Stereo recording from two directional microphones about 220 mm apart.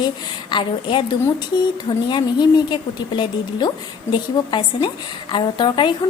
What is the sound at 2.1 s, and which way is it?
A woman's voice, 20° left (ahead or behind).